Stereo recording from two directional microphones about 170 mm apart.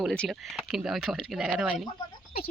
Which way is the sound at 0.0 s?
Centre (ahead or behind).